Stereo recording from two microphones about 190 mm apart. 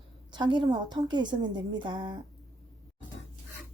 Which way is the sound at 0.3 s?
25° right (ahead or behind).